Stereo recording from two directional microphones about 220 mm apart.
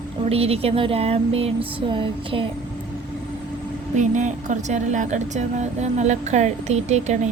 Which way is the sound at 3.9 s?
35° right (ahead or behind).